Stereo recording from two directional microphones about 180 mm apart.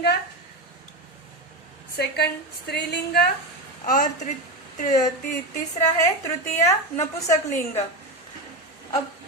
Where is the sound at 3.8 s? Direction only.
45° left (ahead or behind).